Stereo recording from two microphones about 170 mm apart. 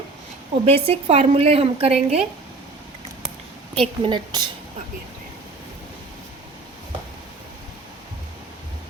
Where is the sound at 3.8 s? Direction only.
30° right (ahead or behind).